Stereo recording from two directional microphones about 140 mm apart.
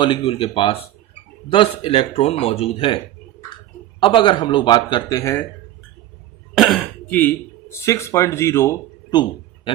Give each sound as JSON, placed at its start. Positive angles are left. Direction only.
{"t": 0.0, "sound": "speech", "side_deg": 40}
{"t": 4.0, "sound": "speech", "side_deg": 35}
{"t": 6.5, "sound": "cough", "side_deg": 0}
{"t": 7.1, "sound": "speech", "side_deg": 15}
{"t": 9.7, "sound": "speech", "side_deg": 35}